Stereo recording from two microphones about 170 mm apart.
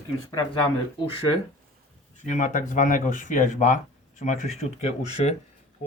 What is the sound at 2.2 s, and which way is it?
Speech, 50° left (ahead or behind).